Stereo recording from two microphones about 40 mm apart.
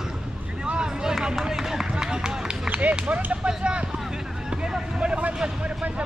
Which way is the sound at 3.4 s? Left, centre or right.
Right.